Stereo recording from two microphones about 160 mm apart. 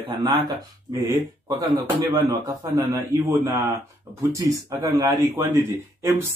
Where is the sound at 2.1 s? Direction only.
15° right (ahead or behind).